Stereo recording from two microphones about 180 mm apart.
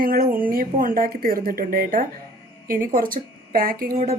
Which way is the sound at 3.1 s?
55° right (ahead or behind).